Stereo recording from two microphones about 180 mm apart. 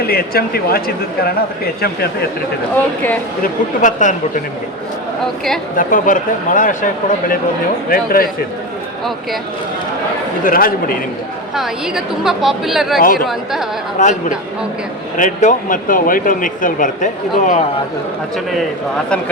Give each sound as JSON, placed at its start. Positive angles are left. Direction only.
{"t": 0.1, "sound": "speech", "side_deg": 60}
{"t": 3.4, "sound": "speech", "side_deg": 45}
{"t": 5.7, "sound": "speech", "side_deg": 50}
{"t": 10.4, "sound": "speech", "side_deg": 55}
{"t": 11.5, "sound": "speech", "side_deg": 0}
{"t": 13.0, "sound": "speech", "side_deg": 50}
{"t": 13.2, "sound": "speech", "side_deg": 0}
{"t": 14.0, "sound": "speech", "side_deg": 45}